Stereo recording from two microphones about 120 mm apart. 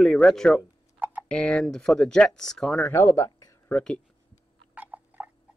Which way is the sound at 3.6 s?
10° left (ahead or behind).